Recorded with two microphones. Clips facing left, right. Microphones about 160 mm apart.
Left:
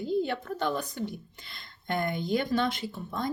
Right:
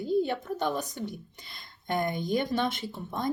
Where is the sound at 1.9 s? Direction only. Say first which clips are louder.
Even; 15° right (ahead or behind).